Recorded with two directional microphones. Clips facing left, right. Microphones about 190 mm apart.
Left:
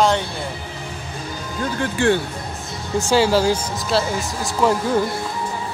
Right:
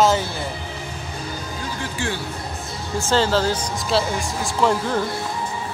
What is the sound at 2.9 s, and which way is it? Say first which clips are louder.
Speech: left 3 dB; 15° left (ahead or behind).